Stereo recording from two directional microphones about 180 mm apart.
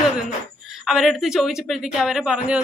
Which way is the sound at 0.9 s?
Centre (ahead or behind).